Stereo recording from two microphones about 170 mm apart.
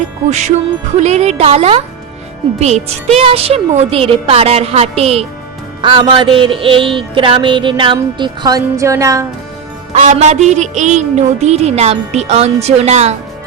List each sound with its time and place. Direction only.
0.3 s music: 45° right (ahead or behind); by 9.2 s 20° right (ahead or behind)
9.9 s music: 45° right (ahead or behind)